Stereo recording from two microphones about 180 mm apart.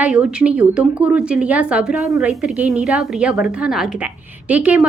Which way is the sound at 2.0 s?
15° right (ahead or behind).